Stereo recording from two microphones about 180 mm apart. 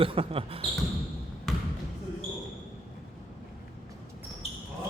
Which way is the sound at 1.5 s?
Centre (ahead or behind).